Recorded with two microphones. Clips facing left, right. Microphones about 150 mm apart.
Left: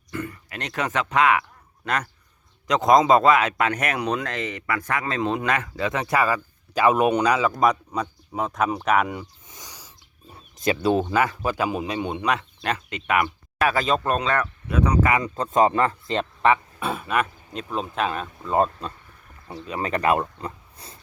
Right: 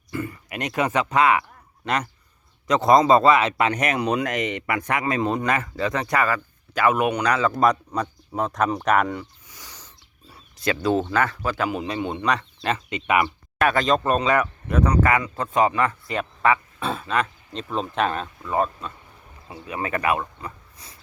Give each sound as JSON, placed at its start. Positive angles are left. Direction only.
{"t": 0.1, "sound": "speech", "side_deg": -5}
{"t": 5.2, "sound": "speech", "side_deg": -5}
{"t": 7.3, "sound": "speech", "side_deg": 10}
{"t": 9.5, "sound": "a sound", "side_deg": 15}
{"t": 10.9, "sound": "speech", "side_deg": 10}
{"t": 12.2, "sound": "speech", "side_deg": 5}
{"t": 15.2, "sound": "speech", "side_deg": 40}
{"t": 15.8, "sound": "speech", "side_deg": 25}
{"t": 16.8, "sound": "speech", "side_deg": 10}
{"t": 18.4, "sound": "speech", "side_deg": 30}